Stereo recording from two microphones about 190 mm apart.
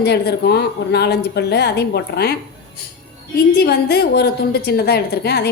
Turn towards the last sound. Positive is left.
turn(degrees=55)  # may be behind; listen again after turning